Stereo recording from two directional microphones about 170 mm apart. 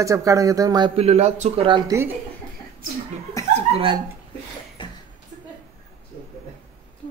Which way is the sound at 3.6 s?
30° right (ahead or behind).